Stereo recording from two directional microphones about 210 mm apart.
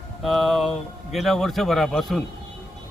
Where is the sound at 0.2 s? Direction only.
Centre (ahead or behind).